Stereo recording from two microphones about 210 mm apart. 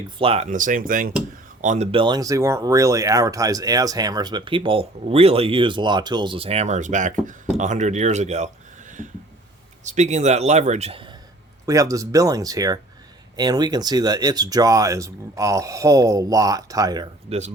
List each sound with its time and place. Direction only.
0.2 s a man's voice: 30° right (ahead or behind)
9.8 s a man's voice: 35° right (ahead or behind)
11.6 s speech: 15° right (ahead or behind)